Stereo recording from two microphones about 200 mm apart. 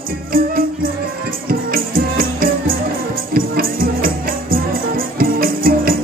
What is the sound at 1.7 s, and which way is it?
Music, 45° right (ahead or behind).